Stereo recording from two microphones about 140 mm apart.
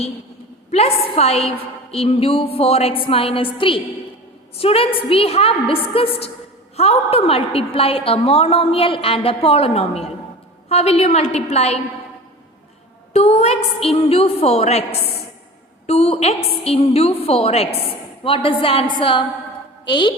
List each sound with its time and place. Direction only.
0.7 s a woman's voice: 45° left (ahead or behind)
13.1 s a woman's voice: 50° left (ahead or behind)
15.9 s a woman's voice: 50° left (ahead or behind)